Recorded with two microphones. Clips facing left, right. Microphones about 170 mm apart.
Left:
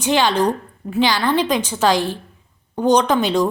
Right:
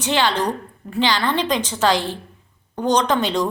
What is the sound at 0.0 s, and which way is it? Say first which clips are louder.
A woman's voice: left 3 dB; 15° left (ahead or behind).